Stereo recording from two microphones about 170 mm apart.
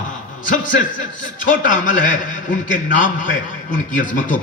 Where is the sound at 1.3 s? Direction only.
50° left (ahead or behind).